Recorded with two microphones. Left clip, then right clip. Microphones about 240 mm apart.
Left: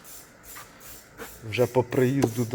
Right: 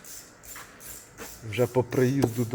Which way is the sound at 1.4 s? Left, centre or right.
Centre.